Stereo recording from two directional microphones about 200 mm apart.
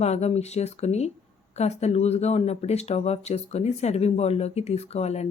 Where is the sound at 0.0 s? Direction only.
35° left (ahead or behind).